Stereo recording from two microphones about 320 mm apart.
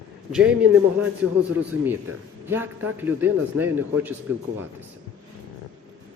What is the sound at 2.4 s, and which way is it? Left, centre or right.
A man's voice, centre.